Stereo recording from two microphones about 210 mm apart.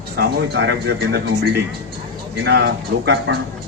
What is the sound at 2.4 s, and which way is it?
Speech, 55° right (ahead or behind).